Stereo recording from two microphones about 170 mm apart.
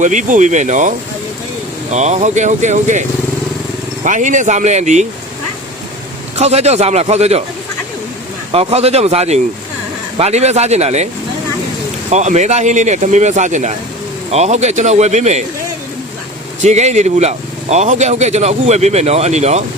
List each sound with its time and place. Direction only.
0.0 s speech: 45° right (ahead or behind)
4.0 s speech: 45° right (ahead or behind)
6.3 s speech: 40° right (ahead or behind)
8.5 s speech: 35° right (ahead or behind)
12.1 s speech: 45° right (ahead or behind)
16.6 s speech: 40° right (ahead or behind)